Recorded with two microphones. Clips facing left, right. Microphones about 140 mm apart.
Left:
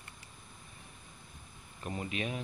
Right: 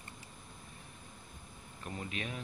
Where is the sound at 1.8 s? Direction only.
10° left (ahead or behind).